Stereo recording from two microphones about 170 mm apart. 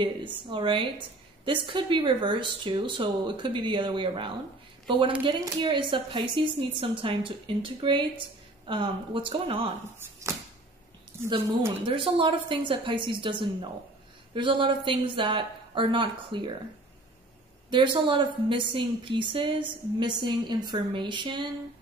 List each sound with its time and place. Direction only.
0.0 s a woman's voice: 30° right (ahead or behind)
11.8 s a woman's voice: 30° right (ahead or behind)
17.6 s a woman's voice: 30° right (ahead or behind)